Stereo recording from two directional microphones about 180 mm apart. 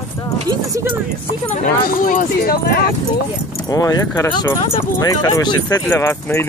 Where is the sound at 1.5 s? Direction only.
50° left (ahead or behind).